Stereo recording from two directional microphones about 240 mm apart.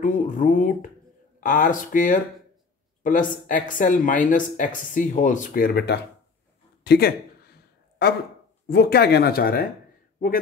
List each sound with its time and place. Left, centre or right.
0.0 s speech: left
6.8 s a sound: left
8.6 s speech: left